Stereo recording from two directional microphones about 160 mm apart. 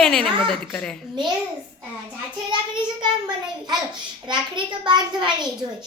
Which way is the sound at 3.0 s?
25° right (ahead or behind).